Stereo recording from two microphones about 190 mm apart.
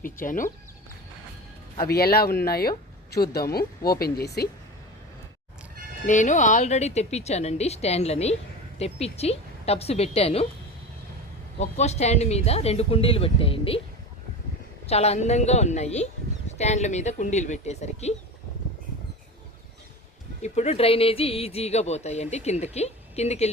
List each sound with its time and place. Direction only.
0.0 s speech: 45° left (ahead or behind)
1.8 s speech: 55° left (ahead or behind)
6.1 s speech: 40° left (ahead or behind)
11.6 s speech: 35° left (ahead or behind)
14.8 s speech: 35° left (ahead or behind)
20.4 s speech: 35° left (ahead or behind)